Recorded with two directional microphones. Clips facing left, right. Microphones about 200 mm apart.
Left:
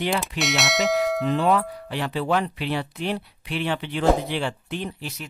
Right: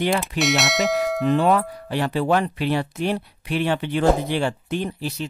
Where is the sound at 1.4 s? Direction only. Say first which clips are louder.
Right 2 dB; 50° right (ahead or behind).